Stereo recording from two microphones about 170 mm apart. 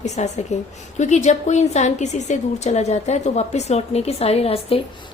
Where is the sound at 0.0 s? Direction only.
40° left (ahead or behind).